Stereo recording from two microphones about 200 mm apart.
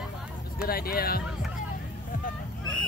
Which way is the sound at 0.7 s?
50° left (ahead or behind).